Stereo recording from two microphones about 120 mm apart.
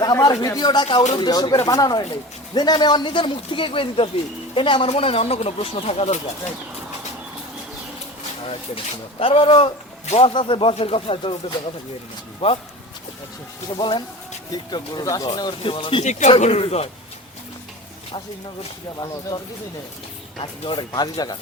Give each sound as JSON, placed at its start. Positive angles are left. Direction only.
{"t": 0.0, "sound": "speech", "side_deg": 30}
{"t": 8.4, "sound": "speech", "side_deg": 50}
{"t": 13.7, "sound": "speech", "side_deg": 45}
{"t": 16.0, "sound": "speech", "side_deg": 75}
{"t": 16.4, "sound": "speech", "side_deg": 60}
{"t": 20.4, "sound": "speech", "side_deg": 40}